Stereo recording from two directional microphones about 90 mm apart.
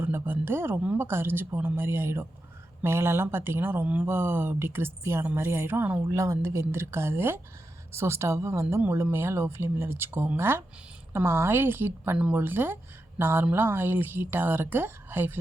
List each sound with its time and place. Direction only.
0.0 s speech: 25° right (ahead or behind)
6.1 s speech: 35° right (ahead or behind)
12.1 s speech: 15° right (ahead or behind)